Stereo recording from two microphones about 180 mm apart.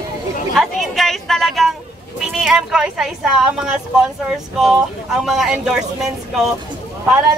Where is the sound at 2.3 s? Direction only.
5° right (ahead or behind).